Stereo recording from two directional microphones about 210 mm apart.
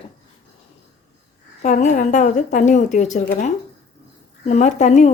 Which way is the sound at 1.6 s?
35° left (ahead or behind).